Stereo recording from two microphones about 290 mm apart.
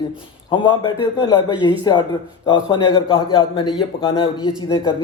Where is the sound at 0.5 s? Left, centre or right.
Centre.